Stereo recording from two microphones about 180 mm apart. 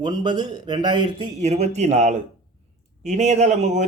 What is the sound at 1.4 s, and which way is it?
Speech, 40° right (ahead or behind).